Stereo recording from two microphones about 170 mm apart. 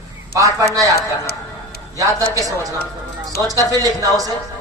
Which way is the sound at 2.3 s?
20° right (ahead or behind).